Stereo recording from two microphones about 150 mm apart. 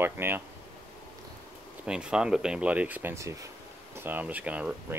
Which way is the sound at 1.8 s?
5° right (ahead or behind).